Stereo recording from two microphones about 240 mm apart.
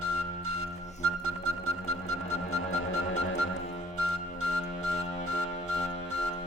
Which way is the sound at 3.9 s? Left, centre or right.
Right.